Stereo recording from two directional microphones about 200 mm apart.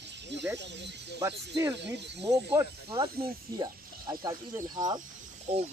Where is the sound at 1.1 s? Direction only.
15° right (ahead or behind).